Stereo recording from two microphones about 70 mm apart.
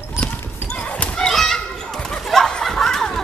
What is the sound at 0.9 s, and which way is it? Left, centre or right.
Children playing, centre.